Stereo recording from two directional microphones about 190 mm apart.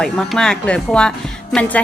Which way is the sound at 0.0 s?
Centre (ahead or behind).